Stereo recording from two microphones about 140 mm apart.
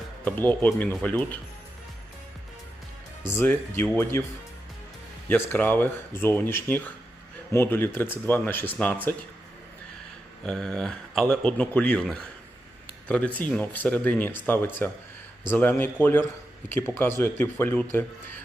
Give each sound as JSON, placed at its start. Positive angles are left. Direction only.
{"t": 0.3, "sound": "speech", "side_deg": 10}
{"t": 3.3, "sound": "speech", "side_deg": 15}
{"t": 5.3, "sound": "speech", "side_deg": 10}
{"t": 10.4, "sound": "speech", "side_deg": 5}